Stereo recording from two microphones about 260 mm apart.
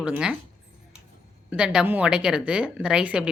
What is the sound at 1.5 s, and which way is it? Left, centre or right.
A woman's voice, centre.